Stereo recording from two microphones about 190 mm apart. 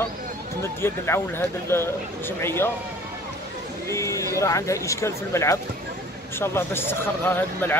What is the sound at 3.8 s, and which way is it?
Speech, 15° left (ahead or behind).